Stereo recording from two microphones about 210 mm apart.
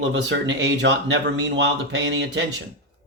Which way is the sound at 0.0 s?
55° right (ahead or behind).